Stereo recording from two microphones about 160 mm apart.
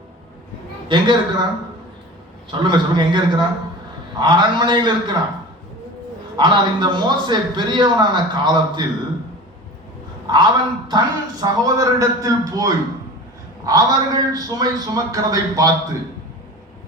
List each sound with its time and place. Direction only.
0.9 s a man's voice: 30° right (ahead or behind)
2.5 s a man's voice: 30° right (ahead or behind)
6.3 s a man's voice: 30° right (ahead or behind)
10.3 s a man's voice: 25° right (ahead or behind)